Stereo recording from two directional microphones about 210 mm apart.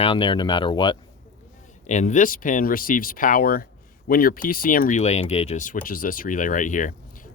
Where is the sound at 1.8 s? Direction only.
35° left (ahead or behind).